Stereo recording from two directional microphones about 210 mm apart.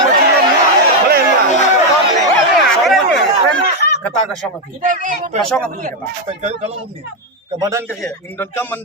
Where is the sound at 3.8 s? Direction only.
50° left (ahead or behind).